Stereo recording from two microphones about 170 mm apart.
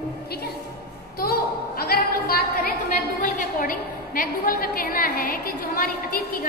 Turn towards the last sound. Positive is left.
turn(degrees=60)  # may be behind; listen again after turning